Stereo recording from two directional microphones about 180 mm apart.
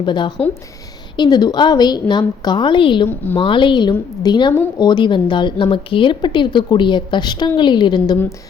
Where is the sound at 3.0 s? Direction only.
10° left (ahead or behind).